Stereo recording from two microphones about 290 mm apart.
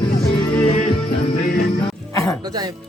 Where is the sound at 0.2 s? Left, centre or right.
Centre.